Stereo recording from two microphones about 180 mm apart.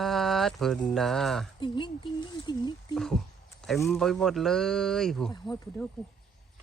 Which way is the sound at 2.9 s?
Centre (ahead or behind).